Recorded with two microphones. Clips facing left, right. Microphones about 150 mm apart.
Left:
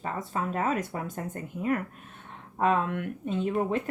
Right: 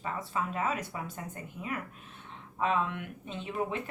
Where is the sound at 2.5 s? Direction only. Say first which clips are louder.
Left 4 dB; 50° left (ahead or behind).